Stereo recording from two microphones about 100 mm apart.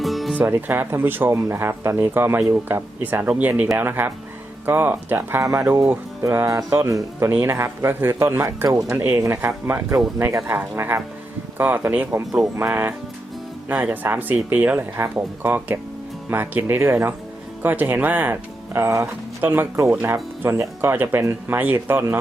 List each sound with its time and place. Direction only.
0.0 s music: centre (ahead or behind)
0.3 s speech: 20° right (ahead or behind)
5.4 s music: 30° right (ahead or behind)
6.7 s speech: 30° right (ahead or behind)
8.6 s music: 35° right (ahead or behind)
9.0 s speech: 20° right (ahead or behind)